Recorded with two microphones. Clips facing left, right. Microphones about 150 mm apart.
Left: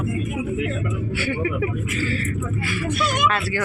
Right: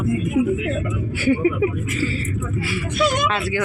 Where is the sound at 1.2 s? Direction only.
35° right (ahead or behind).